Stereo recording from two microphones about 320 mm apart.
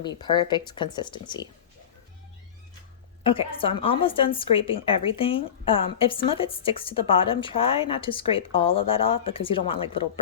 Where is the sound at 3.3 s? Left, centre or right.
Centre.